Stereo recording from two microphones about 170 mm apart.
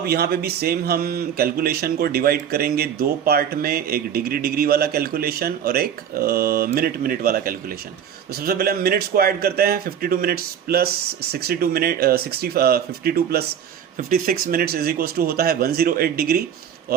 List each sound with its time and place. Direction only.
0.0 s speech: 65° right (ahead or behind)